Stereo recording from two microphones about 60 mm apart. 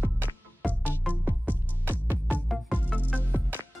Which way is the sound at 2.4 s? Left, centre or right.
Centre.